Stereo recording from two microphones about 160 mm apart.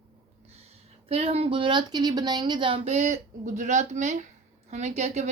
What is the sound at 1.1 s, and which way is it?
A woman's voice, 40° right (ahead or behind).